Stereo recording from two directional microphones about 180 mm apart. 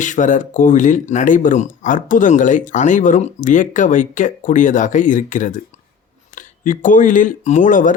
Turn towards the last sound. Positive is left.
turn(degrees=45)  # may be behind; listen again after turning